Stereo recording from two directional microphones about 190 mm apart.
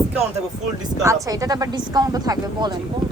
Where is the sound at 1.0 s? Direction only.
20° right (ahead or behind).